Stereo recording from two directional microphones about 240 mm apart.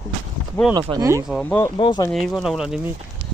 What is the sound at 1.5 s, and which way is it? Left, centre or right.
Speech, centre.